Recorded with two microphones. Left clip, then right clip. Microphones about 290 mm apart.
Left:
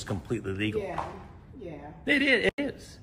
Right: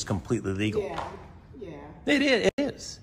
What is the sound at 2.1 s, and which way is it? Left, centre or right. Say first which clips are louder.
Speech: right 1 dB; centre.